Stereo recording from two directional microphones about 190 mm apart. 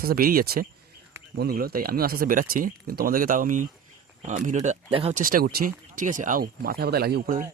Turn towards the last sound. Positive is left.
turn(degrees=-50)  # may be behind; listen again after turning